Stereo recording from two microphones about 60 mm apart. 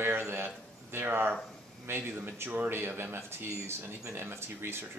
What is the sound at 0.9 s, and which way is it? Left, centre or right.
Speech, right.